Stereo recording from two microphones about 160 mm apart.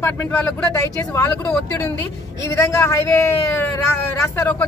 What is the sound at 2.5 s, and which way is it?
A man's voice, 20° left (ahead or behind).